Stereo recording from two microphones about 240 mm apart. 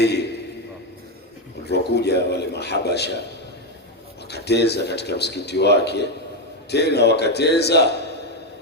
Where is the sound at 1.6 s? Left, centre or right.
Left.